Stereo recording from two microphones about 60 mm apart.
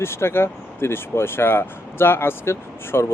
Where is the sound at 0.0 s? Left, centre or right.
Left.